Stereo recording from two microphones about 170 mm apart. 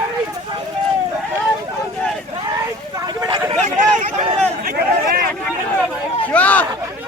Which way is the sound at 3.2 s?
25° right (ahead or behind).